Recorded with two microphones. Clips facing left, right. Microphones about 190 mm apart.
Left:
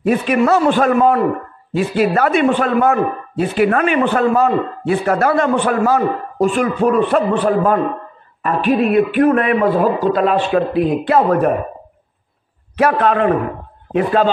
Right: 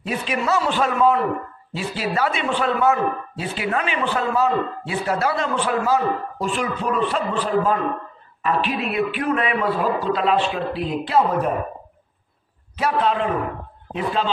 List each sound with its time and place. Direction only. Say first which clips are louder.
0.0 s a man's voice: left 10 dB; 55° left (ahead or behind)
12.7 s a man's voice: left 6 dB; 60° left (ahead or behind)